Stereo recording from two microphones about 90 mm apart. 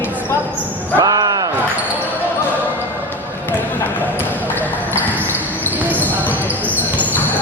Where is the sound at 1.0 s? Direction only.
45° right (ahead or behind).